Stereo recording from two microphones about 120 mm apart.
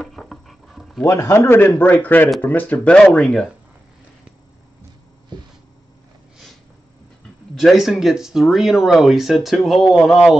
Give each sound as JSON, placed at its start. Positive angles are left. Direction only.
{"t": 0.0, "sound": "dog", "side_deg": 0}
{"t": 1.0, "sound": "a man's voice", "side_deg": 25}
{"t": 7.5, "sound": "speech", "side_deg": 0}